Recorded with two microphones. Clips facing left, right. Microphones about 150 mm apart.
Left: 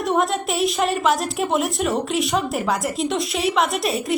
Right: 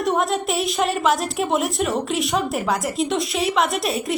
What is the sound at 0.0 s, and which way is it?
A woman's voice, centre (ahead or behind).